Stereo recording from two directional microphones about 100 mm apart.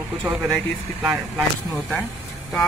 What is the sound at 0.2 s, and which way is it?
Speech, 10° right (ahead or behind).